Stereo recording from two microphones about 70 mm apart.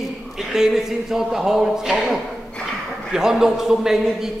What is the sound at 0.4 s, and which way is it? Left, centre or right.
Speech, centre.